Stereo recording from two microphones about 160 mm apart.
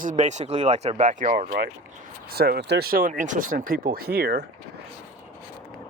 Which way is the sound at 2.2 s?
75° right (ahead or behind).